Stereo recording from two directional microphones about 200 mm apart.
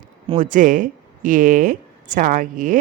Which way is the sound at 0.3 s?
40° right (ahead or behind).